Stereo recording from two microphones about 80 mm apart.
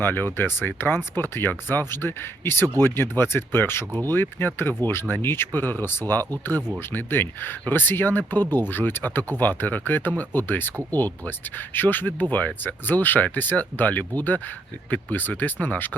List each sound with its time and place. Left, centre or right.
0.0 s speech: left